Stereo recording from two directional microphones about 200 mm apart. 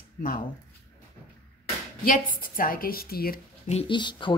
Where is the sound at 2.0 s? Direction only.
45° left (ahead or behind).